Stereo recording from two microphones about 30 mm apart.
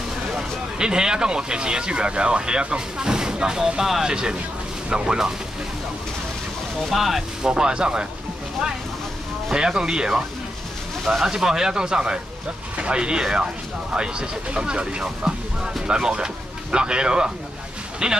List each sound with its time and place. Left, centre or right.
0.4 s speech: right
6.9 s speech: centre
7.4 s speech: right
9.5 s speech: right
11.2 s speech: centre
12.7 s speech: right